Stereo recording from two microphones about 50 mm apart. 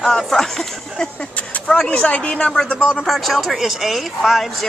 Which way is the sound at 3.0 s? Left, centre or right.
Centre.